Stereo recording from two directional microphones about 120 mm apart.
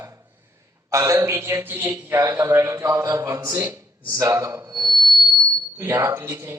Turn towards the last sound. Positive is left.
turn(degrees=-25)  # may be behind; listen again after turning